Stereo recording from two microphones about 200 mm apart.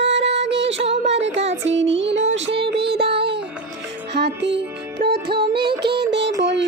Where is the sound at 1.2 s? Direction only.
65° right (ahead or behind).